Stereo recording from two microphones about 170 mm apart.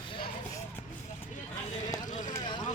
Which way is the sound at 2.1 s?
50° left (ahead or behind).